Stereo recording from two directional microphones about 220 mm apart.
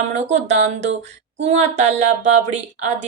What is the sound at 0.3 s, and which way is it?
A woman's voice, 30° right (ahead or behind).